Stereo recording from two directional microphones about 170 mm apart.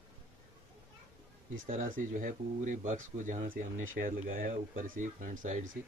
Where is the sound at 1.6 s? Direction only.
55° right (ahead or behind).